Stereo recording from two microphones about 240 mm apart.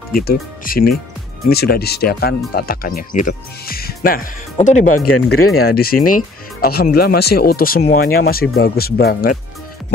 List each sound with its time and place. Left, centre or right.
0.1 s speech: left
4.9 s speech: left
5.8 s speech: left